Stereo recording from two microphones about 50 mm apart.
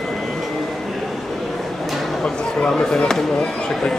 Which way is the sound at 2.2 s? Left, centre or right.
Centre.